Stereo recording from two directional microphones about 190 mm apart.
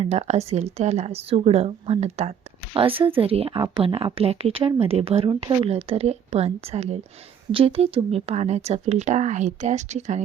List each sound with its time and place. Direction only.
0.0 s a woman's voice: 35° right (ahead or behind)